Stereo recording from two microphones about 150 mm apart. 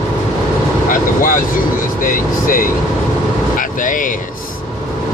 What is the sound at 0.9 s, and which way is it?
Speech, 65° left (ahead or behind).